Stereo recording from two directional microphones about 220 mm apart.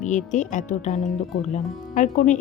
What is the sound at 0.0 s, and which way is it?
Speech, 35° left (ahead or behind).